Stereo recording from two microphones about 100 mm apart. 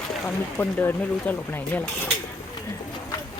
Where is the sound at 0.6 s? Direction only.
20° left (ahead or behind).